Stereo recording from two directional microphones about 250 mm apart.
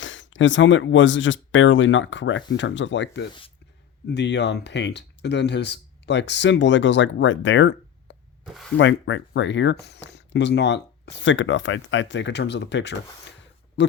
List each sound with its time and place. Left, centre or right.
0.0 s speech: left
8.4 s speech: centre
8.8 s speech: left
13.8 s oink: left